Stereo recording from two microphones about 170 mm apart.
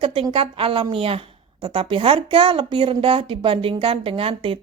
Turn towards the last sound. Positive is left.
turn(degrees=-35)  # may be behind; listen again after turning